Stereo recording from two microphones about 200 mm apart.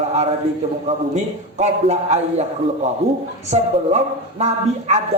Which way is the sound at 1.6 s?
35° right (ahead or behind).